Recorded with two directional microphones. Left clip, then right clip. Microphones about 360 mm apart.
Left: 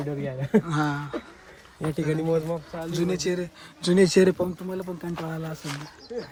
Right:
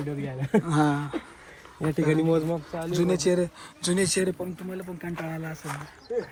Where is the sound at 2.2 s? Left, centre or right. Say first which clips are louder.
Right 1 dB; right.